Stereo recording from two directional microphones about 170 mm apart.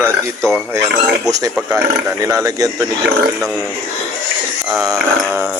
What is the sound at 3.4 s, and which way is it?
Speech, centre (ahead or behind).